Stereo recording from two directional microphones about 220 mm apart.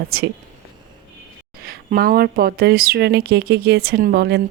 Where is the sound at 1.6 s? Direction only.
45° right (ahead or behind).